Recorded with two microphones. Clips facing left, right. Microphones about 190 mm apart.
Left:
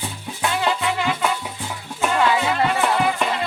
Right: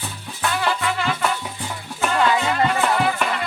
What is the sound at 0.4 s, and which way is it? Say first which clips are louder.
Music: left 1 dB; 20° left (ahead or behind).